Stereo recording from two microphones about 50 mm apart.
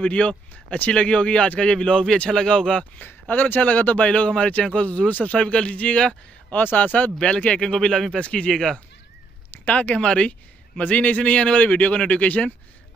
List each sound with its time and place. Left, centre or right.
0.0 s a man's voice: left
3.0 s a man's voice: left; by 6.1 s centre
6.5 s speech: left; by 8.7 s centre
9.7 s speech: left
9.9 s a man's voice: centre